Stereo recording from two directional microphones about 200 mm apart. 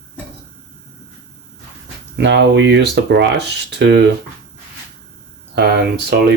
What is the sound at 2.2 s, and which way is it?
Speech, 60° right (ahead or behind).